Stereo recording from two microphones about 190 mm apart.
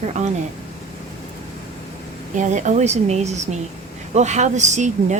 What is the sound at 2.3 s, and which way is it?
Speech, 40° right (ahead or behind).